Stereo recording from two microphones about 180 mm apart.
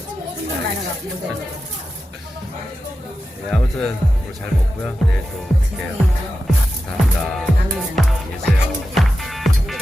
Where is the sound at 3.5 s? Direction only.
Centre (ahead or behind).